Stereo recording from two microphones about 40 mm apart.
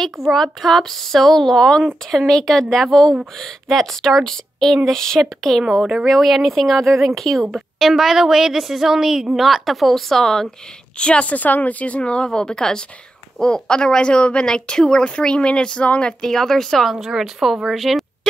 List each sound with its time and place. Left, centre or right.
0.2 s a woman's voice: centre
11.0 s a woman's voice: left
11.2 s speech: left
12.0 s a woman's voice: left
16.2 s speech: centre
16.9 s a woman's voice: centre
17.7 s a sound: centre